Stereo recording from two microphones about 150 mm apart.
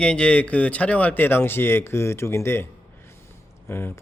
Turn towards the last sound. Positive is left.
turn(degrees=15)  # may be behind; listen again after turning